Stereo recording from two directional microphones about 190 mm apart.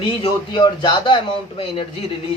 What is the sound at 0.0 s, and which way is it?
Speech, 25° left (ahead or behind).